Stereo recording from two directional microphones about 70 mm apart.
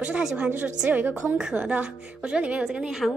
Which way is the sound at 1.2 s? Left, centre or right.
Centre.